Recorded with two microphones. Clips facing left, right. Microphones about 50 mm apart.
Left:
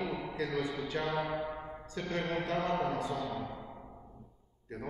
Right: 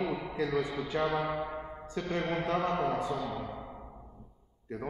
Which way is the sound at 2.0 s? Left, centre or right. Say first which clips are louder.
Right 2 dB; centre.